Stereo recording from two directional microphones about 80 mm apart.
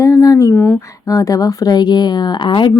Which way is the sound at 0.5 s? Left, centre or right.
Left.